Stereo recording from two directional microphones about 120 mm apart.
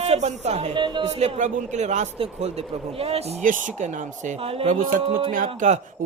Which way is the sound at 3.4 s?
90° right.